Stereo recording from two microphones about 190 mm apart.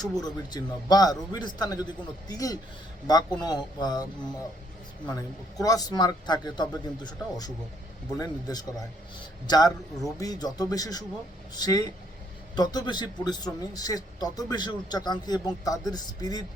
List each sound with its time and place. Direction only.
0.0 s a man's voice: 20° left (ahead or behind)
5.6 s a man's voice: 20° left (ahead or behind)